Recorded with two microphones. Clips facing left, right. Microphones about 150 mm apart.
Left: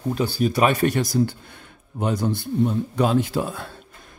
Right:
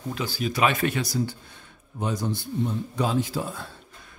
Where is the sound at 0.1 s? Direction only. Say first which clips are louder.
Left 7 dB; 45° left (ahead or behind).